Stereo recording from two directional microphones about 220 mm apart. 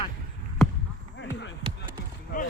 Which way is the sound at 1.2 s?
55° left (ahead or behind).